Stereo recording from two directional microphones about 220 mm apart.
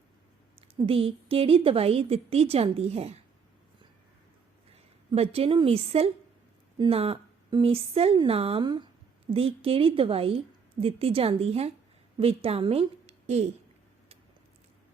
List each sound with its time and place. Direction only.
0.9 s a woman's voice: 25° right (ahead or behind)
4.7 s a woman's voice: 25° right (ahead or behind)